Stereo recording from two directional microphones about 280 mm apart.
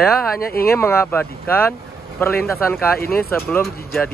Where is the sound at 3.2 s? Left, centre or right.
Centre.